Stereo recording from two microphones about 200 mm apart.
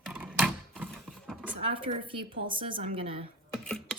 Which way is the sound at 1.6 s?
25° right (ahead or behind).